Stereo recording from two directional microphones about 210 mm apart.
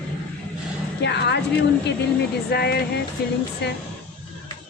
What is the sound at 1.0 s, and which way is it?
Speech, 55° left (ahead or behind).